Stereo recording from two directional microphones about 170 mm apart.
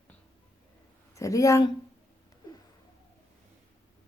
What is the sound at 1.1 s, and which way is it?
Speech, 20° left (ahead or behind).